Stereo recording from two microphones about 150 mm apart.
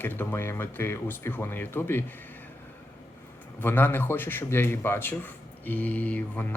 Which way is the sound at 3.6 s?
15° left (ahead or behind).